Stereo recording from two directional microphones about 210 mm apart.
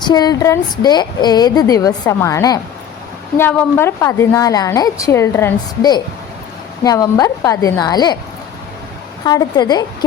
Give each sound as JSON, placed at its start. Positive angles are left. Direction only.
{"t": 0.0, "sound": "a woman's voice", "side_deg": 20}
{"t": 9.2, "sound": "a woman's voice", "side_deg": 20}